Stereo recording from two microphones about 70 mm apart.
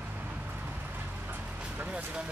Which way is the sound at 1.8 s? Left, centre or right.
Right.